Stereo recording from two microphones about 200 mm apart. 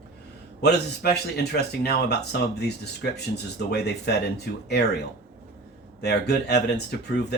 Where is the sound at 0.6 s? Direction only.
55° left (ahead or behind).